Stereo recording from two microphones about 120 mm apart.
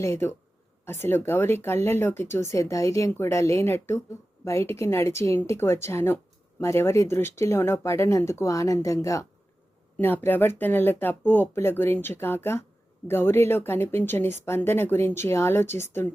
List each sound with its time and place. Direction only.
0.0 s speech: 20° left (ahead or behind)